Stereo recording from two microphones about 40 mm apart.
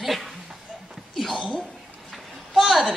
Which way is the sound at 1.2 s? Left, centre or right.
Centre.